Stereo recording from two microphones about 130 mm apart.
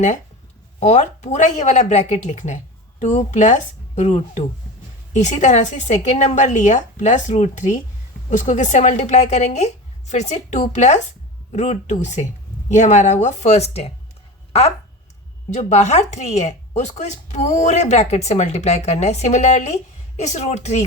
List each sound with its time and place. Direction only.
0.8 s speech: 65° left (ahead or behind)
15.4 s speech: 65° left (ahead or behind)